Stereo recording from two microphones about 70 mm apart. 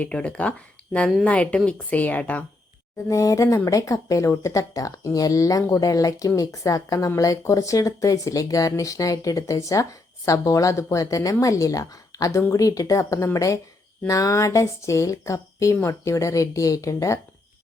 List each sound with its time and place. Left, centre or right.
0.0 s a woman's voice: centre
3.1 s speech: left